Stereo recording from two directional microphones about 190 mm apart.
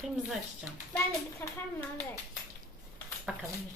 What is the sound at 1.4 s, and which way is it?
Speech, 10° left (ahead or behind).